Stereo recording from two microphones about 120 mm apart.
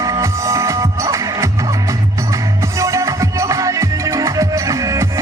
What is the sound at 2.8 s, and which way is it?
Music, 25° right (ahead or behind).